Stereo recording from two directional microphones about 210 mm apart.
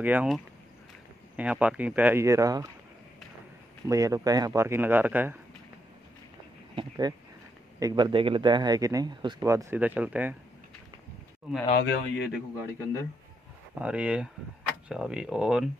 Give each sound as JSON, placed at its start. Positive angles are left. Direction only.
{"t": 0.0, "sound": "speech", "side_deg": -5}
{"t": 3.8, "sound": "speech", "side_deg": -15}
{"t": 6.7, "sound": "speech", "side_deg": -20}
{"t": 11.7, "sound": "speech", "side_deg": 50}
{"t": 13.7, "sound": "speech", "side_deg": -5}